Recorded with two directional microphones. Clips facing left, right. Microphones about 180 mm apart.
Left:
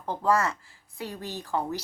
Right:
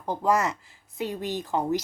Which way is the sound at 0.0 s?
15° right (ahead or behind).